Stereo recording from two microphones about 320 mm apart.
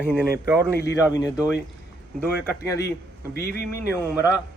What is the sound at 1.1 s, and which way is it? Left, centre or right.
Speech, centre.